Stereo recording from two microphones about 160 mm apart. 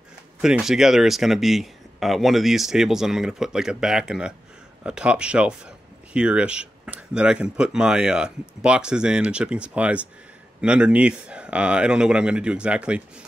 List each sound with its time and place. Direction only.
0.4 s speech: 5° right (ahead or behind)